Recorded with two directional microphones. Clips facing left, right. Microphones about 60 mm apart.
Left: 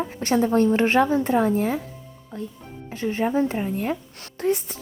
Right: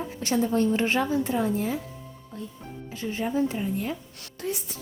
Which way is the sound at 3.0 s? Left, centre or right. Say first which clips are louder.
Left 4 dB; left.